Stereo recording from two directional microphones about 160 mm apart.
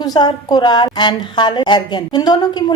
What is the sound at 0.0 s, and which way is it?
A woman's voice, 25° left (ahead or behind).